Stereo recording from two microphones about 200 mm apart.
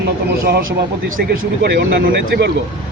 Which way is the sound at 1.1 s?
50° right (ahead or behind).